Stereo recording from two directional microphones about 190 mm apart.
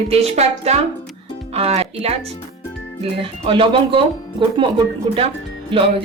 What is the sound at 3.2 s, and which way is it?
Speech, 25° right (ahead or behind).